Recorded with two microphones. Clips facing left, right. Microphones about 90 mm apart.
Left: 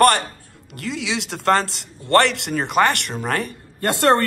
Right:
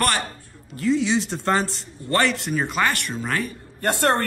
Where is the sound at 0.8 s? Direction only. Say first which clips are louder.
Right 6 dB; 90° left.